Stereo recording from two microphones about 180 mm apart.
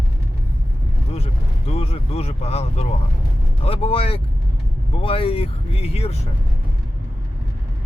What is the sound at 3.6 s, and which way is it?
Speech, 35° left (ahead or behind).